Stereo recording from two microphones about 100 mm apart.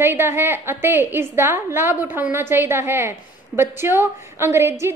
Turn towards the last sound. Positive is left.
turn(degrees=-25)  # may be behind; listen again after turning